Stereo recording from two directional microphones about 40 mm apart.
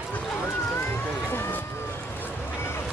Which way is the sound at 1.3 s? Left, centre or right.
Left.